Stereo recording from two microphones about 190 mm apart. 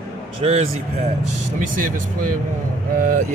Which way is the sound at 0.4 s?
35° right (ahead or behind).